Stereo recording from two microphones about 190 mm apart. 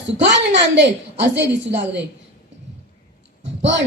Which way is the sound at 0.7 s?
65° right (ahead or behind).